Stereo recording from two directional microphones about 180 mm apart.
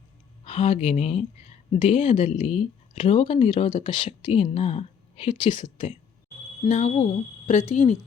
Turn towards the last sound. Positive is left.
turn(degrees=35)  # may be behind; listen again after turning